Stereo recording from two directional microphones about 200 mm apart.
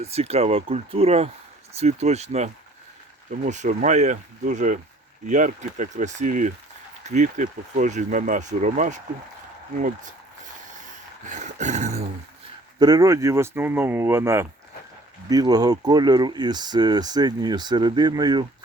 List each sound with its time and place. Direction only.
0.0 s speech: 30° right (ahead or behind)
11.3 s dog: 35° right (ahead or behind)
12.8 s speech: 15° right (ahead or behind)